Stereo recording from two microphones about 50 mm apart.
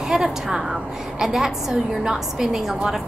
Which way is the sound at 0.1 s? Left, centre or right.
Centre.